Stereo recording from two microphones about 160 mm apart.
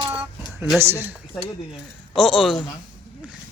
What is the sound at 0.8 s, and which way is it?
Speech, 15° right (ahead or behind).